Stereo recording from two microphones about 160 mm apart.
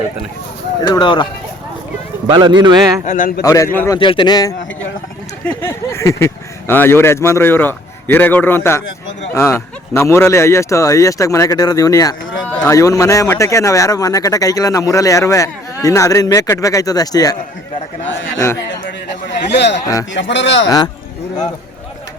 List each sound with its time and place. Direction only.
0.8 s a man's voice: 25° left (ahead or behind)
2.2 s speech: 25° right (ahead or behind)
3.1 s a man's voice: 60° left (ahead or behind)
3.4 s a man's voice: 20° left (ahead or behind)
3.9 s a man's voice: 30° left (ahead or behind)
5.6 s a man's voice: 15° left (ahead or behind)
18.7 s a sound: 90° left
20.1 s speech: 90° left
20.7 s a man's voice: 25° left (ahead or behind)